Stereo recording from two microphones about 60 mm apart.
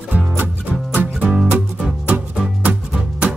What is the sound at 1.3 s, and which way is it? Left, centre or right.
Music, centre.